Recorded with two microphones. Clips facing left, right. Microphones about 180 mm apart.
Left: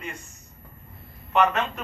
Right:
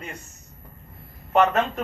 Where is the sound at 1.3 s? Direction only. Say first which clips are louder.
Right 3 dB; 40° right (ahead or behind).